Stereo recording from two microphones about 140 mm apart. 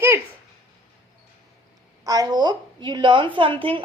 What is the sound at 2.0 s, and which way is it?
A woman's voice, 25° right (ahead or behind).